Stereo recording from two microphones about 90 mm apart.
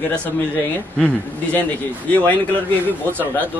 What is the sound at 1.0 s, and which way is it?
Speech, 15° left (ahead or behind).